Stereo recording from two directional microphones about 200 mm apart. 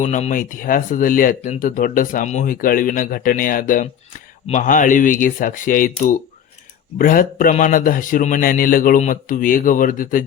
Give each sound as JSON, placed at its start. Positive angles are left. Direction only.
{"t": 0.0, "sound": "speech", "side_deg": 35}